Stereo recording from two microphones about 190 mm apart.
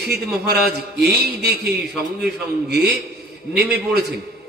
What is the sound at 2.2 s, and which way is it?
A man's voice, 60° right (ahead or behind).